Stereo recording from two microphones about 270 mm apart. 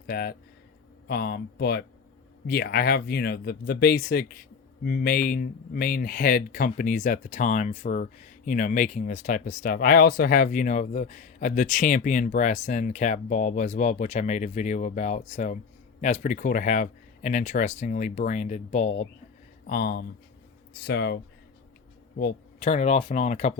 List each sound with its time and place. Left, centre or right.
0.1 s speech: left
22.2 s speech: left